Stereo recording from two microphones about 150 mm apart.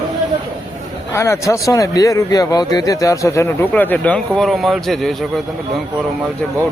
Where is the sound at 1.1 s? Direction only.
20° left (ahead or behind); by 5.1 s centre (ahead or behind).